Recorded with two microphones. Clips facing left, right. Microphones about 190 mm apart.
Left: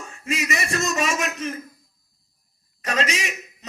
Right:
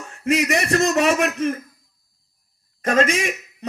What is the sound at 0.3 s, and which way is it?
A man's voice, 65° right (ahead or behind).